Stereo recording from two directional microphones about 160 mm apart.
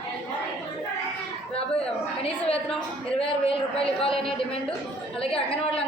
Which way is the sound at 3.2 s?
35° left (ahead or behind).